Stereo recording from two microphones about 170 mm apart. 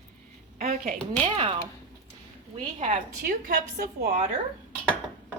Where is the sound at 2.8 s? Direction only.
50° right (ahead or behind).